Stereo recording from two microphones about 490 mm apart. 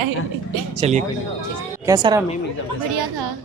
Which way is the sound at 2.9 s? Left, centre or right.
Right.